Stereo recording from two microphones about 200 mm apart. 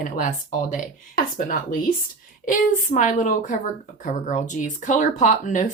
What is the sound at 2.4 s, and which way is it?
Speech, 40° left (ahead or behind).